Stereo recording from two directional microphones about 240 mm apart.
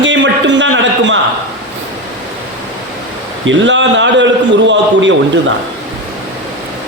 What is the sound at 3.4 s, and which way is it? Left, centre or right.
A man's voice, right.